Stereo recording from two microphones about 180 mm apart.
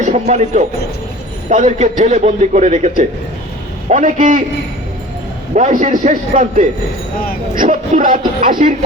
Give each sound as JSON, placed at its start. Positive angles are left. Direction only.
{"t": 0.0, "sound": "a man's voice", "side_deg": -40}
{"t": 5.5, "sound": "a man's voice", "side_deg": -40}